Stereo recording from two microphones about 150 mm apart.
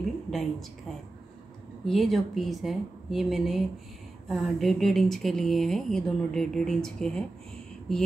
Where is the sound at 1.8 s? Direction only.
Centre (ahead or behind).